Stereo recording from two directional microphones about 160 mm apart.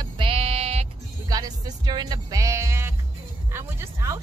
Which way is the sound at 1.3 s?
25° right (ahead or behind).